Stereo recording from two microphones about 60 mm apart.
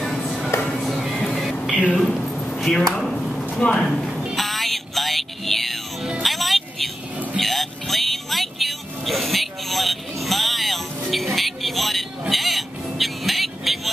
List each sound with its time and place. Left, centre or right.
0.0 s music: centre
1.6 s a sound: left; by 3.4 s centre
3.4 s speech: centre
3.8 s speech: centre
4.4 s music: centre
7.9 s vehicle: centre
11.1 s a sound: centre